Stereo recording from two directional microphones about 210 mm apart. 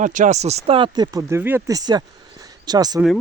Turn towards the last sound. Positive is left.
turn(degrees=-20)  # may be behind; listen again after turning